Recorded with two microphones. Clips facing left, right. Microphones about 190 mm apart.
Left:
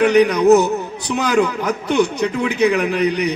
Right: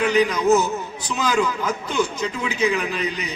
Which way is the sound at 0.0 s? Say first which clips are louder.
Left 6 dB; 65° left (ahead or behind).